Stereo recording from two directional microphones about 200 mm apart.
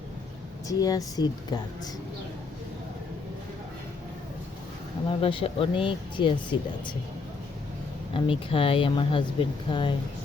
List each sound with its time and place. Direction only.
0.7 s speech: 15° left (ahead or behind)
5.0 s speech: 25° left (ahead or behind)
8.1 s speech: 25° left (ahead or behind)